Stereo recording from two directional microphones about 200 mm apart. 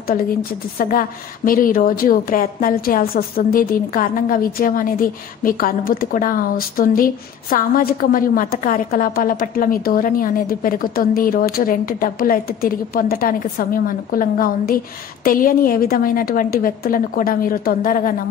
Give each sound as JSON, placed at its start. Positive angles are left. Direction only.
{"t": 0.0, "sound": "a woman's voice", "side_deg": 45}